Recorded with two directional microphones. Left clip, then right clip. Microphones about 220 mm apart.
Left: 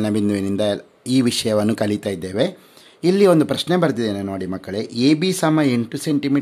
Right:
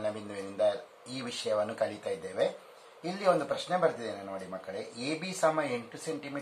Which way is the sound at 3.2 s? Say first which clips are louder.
Left 11 dB; 55° left (ahead or behind).